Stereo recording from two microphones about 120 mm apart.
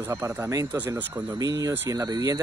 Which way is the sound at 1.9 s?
30° right (ahead or behind).